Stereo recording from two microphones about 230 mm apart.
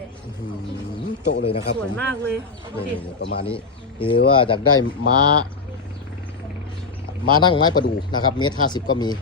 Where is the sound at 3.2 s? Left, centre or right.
Left.